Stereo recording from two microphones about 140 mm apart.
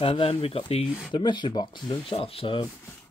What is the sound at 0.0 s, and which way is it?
Speech, 40° left (ahead or behind).